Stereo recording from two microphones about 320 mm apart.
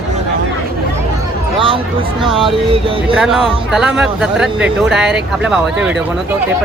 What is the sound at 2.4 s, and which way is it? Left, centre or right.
Speech, centre.